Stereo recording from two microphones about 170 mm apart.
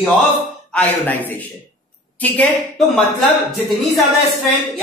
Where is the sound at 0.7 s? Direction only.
10° left (ahead or behind).